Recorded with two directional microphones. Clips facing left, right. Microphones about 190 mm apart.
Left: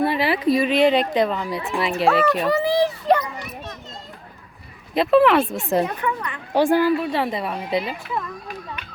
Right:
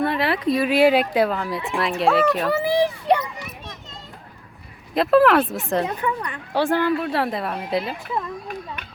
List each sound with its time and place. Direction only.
0.0 s a sound: centre (ahead or behind)
0.4 s speech: centre (ahead or behind)
4.9 s speech: centre (ahead or behind)
5.8 s speech: 30° right (ahead or behind)
6.5 s speech: 10° left (ahead or behind)